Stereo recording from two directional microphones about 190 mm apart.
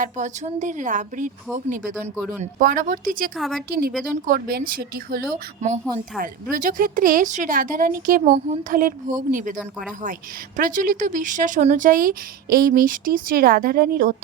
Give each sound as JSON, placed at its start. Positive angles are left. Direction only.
{"t": 0.0, "sound": "speech", "side_deg": -40}
{"t": 3.3, "sound": "a woman's voice", "side_deg": 0}
{"t": 3.7, "sound": "speech", "side_deg": -55}
{"t": 10.6, "sound": "speech", "side_deg": -45}